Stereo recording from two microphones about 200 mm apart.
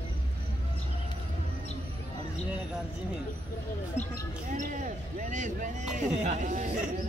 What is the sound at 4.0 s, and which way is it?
Basketball bounce, 35° left (ahead or behind).